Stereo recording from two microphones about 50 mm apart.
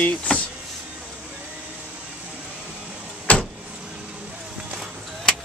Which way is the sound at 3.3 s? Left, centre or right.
Left.